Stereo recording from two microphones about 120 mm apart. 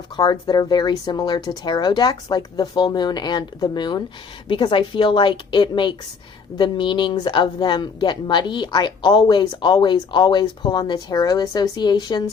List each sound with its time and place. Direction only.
0.2 s speech: 35° left (ahead or behind)